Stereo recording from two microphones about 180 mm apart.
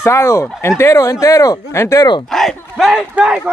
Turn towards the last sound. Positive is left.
turn(degrees=-5)  # may be behind; listen again after turning